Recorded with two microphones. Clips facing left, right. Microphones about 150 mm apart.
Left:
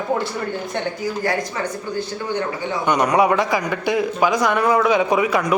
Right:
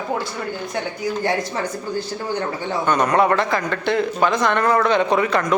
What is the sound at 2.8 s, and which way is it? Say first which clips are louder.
Speech: left 1 dB; 15° left (ahead or behind).